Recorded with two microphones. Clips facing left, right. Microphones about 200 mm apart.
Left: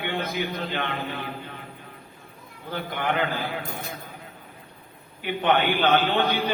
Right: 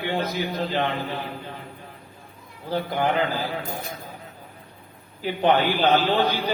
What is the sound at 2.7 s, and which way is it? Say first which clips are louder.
Mantra: right 6 dB; 35° right (ahead or behind).